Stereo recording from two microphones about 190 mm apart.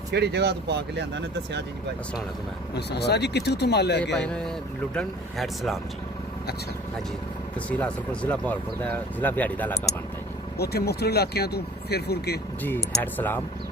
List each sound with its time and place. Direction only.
0.1 s speech: 60° right (ahead or behind)
2.7 s speech: 60° left (ahead or behind)
4.3 s speech: 5° left (ahead or behind)
7.7 s speech: 5° left (ahead or behind)
10.6 s speech: 55° left (ahead or behind)
12.6 s speech: 10° left (ahead or behind)